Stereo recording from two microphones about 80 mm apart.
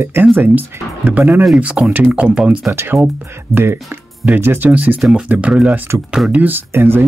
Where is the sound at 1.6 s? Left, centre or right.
Centre.